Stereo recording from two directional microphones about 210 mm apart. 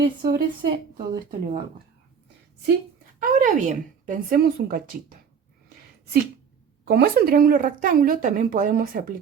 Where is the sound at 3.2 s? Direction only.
35° right (ahead or behind).